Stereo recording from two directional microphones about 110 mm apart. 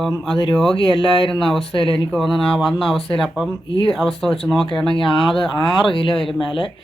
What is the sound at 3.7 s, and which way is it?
Speech, 50° left (ahead or behind).